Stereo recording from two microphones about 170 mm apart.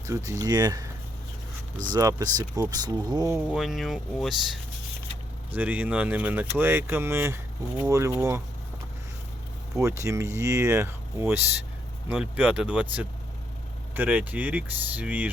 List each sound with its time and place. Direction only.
0.0 s speech: 20° right (ahead or behind)
1.9 s speech: 20° right (ahead or behind)
3.3 s speech: centre (ahead or behind)
9.7 s speech: 15° right (ahead or behind)